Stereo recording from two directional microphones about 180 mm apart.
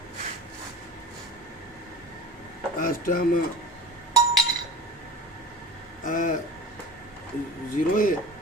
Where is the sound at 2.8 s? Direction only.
50° left (ahead or behind).